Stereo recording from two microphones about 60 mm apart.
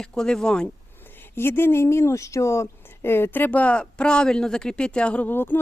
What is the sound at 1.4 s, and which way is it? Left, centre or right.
Speech, left.